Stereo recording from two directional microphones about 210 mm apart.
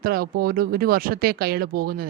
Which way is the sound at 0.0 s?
45° right (ahead or behind).